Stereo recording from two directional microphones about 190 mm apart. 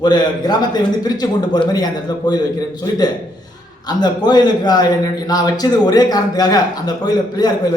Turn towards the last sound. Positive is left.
turn(degrees=20)  # may be behind; listen again after turning